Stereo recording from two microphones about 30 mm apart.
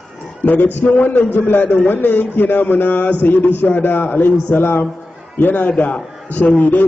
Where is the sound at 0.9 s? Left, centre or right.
Left.